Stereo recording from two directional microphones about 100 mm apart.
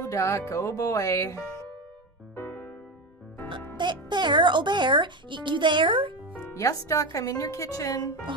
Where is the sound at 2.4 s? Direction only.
20° left (ahead or behind).